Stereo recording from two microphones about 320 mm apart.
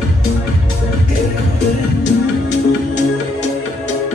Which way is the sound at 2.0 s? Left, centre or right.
Left.